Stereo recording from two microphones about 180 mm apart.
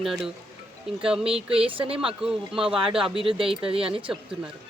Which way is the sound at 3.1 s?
30° right (ahead or behind).